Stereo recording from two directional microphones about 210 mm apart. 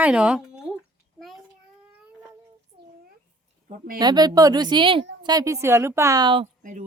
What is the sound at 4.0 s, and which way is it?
A woman's voice, 20° right (ahead or behind).